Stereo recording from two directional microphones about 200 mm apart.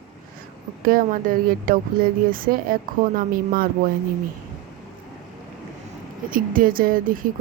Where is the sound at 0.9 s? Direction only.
45° right (ahead or behind).